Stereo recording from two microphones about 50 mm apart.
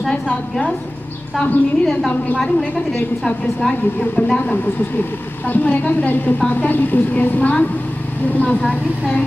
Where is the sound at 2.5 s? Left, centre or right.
Centre.